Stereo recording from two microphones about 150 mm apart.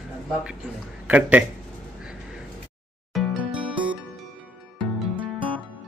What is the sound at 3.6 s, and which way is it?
Music, 35° right (ahead or behind).